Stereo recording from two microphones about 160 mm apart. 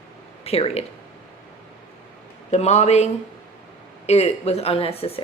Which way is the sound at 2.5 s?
45° left (ahead or behind).